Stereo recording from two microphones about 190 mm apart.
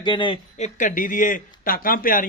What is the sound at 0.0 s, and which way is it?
Speech, 25° left (ahead or behind).